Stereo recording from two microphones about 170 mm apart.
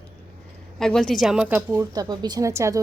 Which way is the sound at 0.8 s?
5° left (ahead or behind).